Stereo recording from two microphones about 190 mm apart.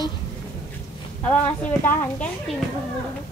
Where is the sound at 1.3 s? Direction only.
10° left (ahead or behind).